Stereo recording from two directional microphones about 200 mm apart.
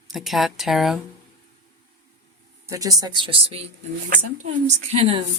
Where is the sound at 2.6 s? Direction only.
15° right (ahead or behind).